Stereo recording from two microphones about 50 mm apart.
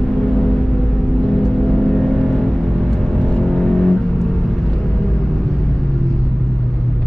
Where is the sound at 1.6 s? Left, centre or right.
Centre.